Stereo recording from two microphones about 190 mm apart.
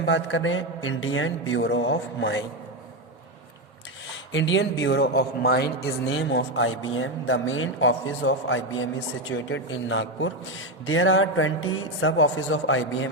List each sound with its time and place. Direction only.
0.0 s speech: 75° left (ahead or behind)
4.3 s a man's voice: 70° left (ahead or behind); by 13.1 s 90° left